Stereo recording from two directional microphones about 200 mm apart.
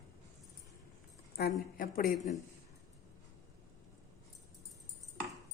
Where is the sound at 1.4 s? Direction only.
50° left (ahead or behind).